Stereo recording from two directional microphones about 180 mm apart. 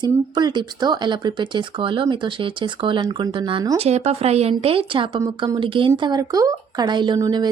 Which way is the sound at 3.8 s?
35° right (ahead or behind).